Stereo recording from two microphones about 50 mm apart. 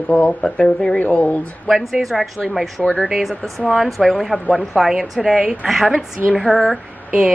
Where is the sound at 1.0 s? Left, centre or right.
Left.